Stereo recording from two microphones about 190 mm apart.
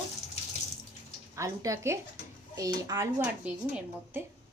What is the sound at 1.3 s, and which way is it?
A woman's voice, 15° right (ahead or behind).